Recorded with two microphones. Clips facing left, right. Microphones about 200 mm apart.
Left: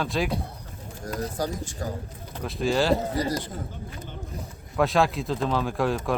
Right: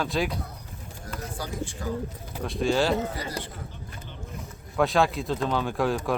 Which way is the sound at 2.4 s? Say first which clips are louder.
Even; centre (ahead or behind).